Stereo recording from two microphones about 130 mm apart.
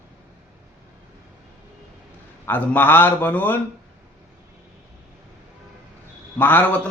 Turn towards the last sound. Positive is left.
turn(degrees=15)  # may be behind; listen again after turning